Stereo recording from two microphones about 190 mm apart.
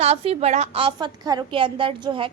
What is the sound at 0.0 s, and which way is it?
A woman's voice, 35° right (ahead or behind).